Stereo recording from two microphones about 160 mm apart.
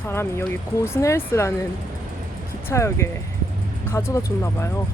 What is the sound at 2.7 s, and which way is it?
Speech, 15° left (ahead or behind).